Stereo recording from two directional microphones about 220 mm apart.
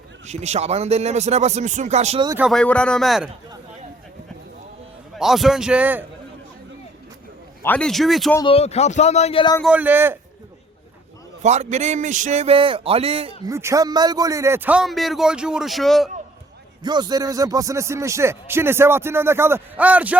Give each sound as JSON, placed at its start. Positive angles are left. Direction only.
{"t": 0.3, "sound": "a man's voice", "side_deg": -30}
{"t": 2.4, "sound": "a man's voice", "side_deg": 0}
{"t": 5.1, "sound": "a man's voice", "side_deg": 0}
{"t": 7.6, "sound": "a man's voice", "side_deg": 5}
{"t": 8.4, "sound": "speech", "side_deg": 25}
{"t": 9.6, "sound": "speech", "side_deg": -5}
{"t": 11.4, "sound": "a man's voice", "side_deg": -30}
{"t": 13.5, "sound": "a man's voice", "side_deg": -15}
{"t": 16.8, "sound": "speech", "side_deg": -20}